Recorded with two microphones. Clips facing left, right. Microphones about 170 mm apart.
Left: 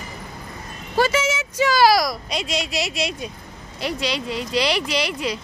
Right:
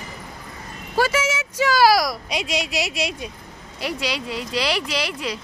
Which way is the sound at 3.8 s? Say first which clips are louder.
Left 1 dB; 5° right (ahead or behind).